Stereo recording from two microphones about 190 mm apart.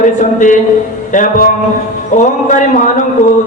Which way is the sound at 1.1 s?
45° left (ahead or behind).